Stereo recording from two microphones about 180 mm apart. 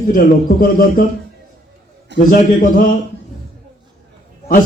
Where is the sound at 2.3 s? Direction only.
50° left (ahead or behind).